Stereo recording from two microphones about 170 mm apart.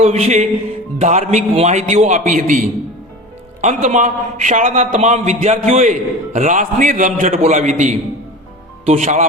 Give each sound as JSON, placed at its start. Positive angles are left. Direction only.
{"t": 0.0, "sound": "music", "side_deg": -40}
{"t": 0.9, "sound": "a man's voice", "side_deg": -45}